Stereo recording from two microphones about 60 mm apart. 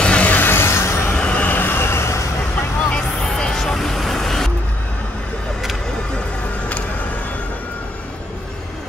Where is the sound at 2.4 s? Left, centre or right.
Left.